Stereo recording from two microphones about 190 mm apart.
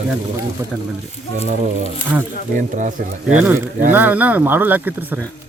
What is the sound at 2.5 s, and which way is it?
Speech, 40° right (ahead or behind).